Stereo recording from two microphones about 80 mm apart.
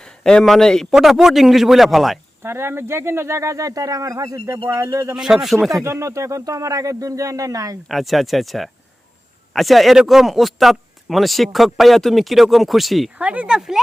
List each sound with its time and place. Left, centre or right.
0.0 s a man's voice: centre
2.4 s speech: right
5.1 s speech: centre
5.8 s speech: right
7.9 s speech: centre
13.1 s speech: centre